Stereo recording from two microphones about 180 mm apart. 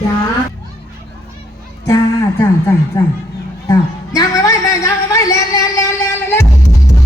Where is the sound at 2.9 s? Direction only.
15° left (ahead or behind).